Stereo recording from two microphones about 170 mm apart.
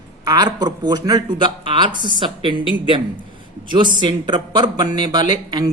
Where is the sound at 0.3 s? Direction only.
25° right (ahead or behind).